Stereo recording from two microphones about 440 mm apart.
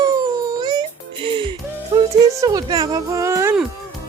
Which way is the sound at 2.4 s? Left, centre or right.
Centre.